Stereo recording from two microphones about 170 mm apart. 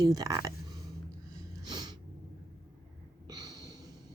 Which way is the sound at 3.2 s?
25° right (ahead or behind).